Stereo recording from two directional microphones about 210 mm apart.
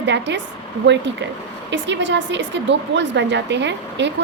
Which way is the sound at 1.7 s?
60° right (ahead or behind).